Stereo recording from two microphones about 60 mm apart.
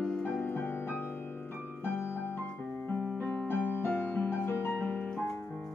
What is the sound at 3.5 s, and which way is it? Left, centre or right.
Keyboard, left.